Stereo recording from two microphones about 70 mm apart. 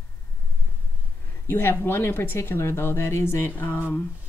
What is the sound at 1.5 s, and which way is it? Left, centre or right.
Speech, left.